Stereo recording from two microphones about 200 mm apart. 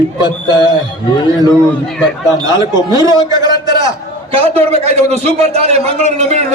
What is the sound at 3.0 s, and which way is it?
Speech, 20° left (ahead or behind).